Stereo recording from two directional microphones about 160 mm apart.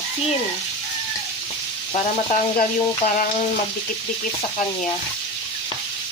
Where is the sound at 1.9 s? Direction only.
40° left (ahead or behind).